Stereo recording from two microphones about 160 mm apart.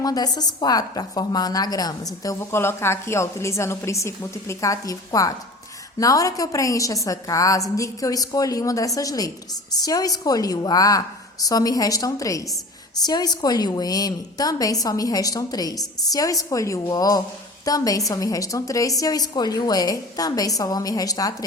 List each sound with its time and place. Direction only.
0.0 s a woman's voice: 25° left (ahead or behind)